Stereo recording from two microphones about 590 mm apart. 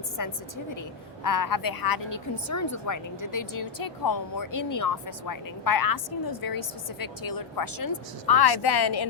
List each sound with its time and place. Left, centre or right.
0.2 s a woman's voice: left